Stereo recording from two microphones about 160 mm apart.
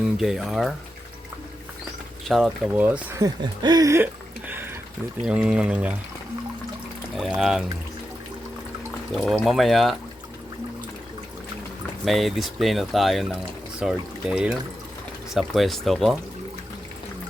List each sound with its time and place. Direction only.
0.0 s speech: centre (ahead or behind)
2.2 s speech: centre (ahead or behind)
7.2 s speech: centre (ahead or behind)
9.2 s speech: centre (ahead or behind)
12.0 s speech: centre (ahead or behind)